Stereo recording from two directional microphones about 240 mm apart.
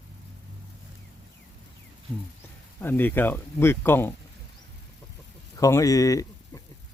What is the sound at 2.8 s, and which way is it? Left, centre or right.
Speech, centre.